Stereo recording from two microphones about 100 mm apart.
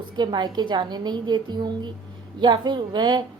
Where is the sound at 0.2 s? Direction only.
45° right (ahead or behind).